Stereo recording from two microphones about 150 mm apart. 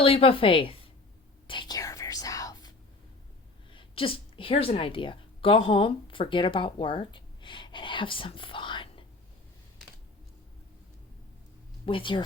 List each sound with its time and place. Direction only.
0.0 s a woman's voice: 40° left (ahead or behind)
1.5 s whispering: 30° left (ahead or behind)
3.7 s a woman's voice: 35° left (ahead or behind)
11.9 s a woman's voice: 35° left (ahead or behind)